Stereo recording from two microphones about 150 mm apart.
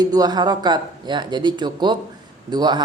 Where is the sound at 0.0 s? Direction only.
25° right (ahead or behind).